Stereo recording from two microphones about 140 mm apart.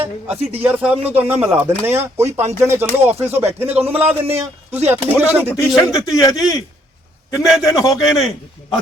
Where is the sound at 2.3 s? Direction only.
50° right (ahead or behind).